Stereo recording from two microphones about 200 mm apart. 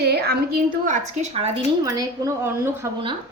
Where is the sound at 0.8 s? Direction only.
35° right (ahead or behind).